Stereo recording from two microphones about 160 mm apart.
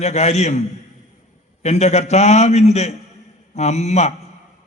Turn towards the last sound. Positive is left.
turn(degrees=45)  # may be behind; listen again after turning